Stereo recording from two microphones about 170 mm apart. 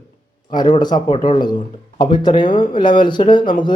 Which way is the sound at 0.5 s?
25° left (ahead or behind).